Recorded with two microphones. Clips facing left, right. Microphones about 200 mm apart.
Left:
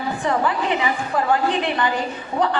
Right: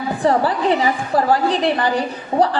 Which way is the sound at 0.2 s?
35° right (ahead or behind).